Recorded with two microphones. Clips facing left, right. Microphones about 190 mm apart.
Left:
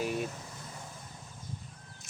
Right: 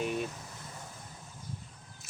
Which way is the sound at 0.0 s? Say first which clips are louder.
Even; 5° left (ahead or behind).